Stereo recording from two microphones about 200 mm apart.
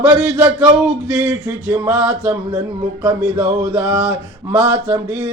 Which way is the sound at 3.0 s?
20° right (ahead or behind).